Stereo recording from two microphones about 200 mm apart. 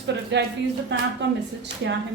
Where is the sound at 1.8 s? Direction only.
60° right (ahead or behind).